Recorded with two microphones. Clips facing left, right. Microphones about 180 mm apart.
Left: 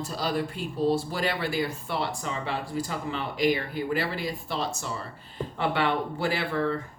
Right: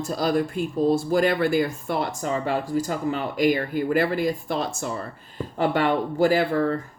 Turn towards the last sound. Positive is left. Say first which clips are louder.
# right 7 dB
turn(degrees=-40)  # may be behind; listen again after turning